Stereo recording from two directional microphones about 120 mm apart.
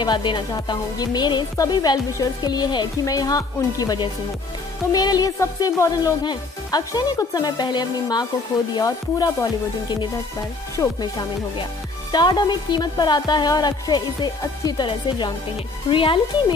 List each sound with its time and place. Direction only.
0.0 s speech: 40° left (ahead or behind)